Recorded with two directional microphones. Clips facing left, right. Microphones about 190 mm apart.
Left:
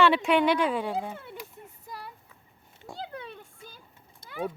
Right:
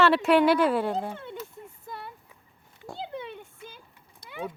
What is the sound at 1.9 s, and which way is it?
Clip-clop, centre (ahead or behind).